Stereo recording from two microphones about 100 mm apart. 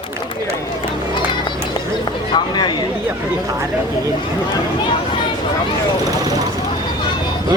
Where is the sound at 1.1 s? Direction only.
50° left (ahead or behind).